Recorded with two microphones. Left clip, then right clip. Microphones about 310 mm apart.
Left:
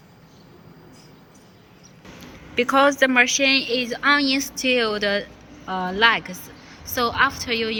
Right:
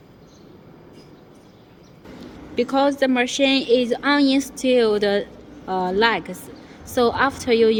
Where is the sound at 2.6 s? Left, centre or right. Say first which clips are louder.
Left 2 dB; centre.